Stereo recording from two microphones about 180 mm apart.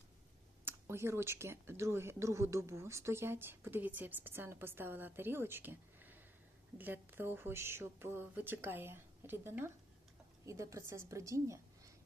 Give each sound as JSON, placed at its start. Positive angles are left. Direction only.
{"t": 0.6, "sound": "speech", "side_deg": -15}